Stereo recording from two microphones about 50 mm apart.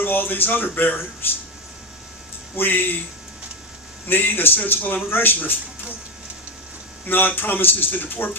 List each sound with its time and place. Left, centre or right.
0.0 s speech: left
2.6 s speech: left
4.0 s speech: left
7.1 s speech: left